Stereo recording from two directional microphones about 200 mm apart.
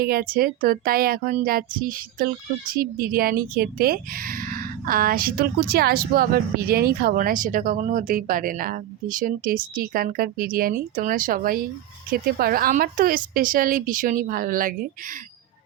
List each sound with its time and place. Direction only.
0.0 s speech: 50° right (ahead or behind)